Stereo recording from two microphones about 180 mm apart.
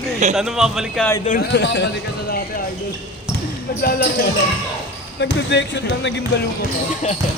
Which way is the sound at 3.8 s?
55° left (ahead or behind).